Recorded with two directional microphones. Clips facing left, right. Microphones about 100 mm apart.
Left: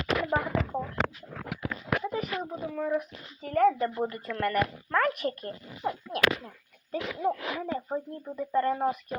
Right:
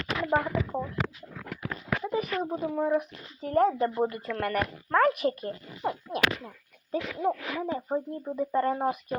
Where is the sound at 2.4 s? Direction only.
35° right (ahead or behind).